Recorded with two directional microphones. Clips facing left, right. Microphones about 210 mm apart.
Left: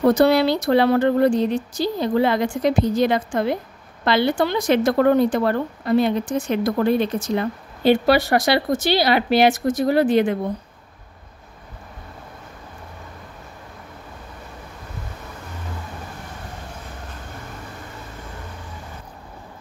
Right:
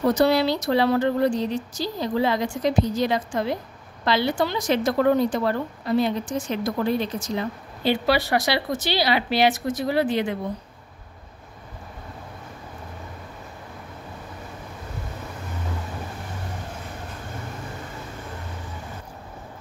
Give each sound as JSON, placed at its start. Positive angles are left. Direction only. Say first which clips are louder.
{"t": 0.0, "sound": "speech", "louder": "left 4 dB", "side_deg": 55}